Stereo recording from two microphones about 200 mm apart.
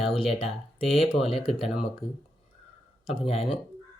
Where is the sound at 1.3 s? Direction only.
Centre (ahead or behind).